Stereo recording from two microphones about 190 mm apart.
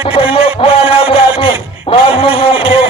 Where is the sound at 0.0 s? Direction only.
30° left (ahead or behind).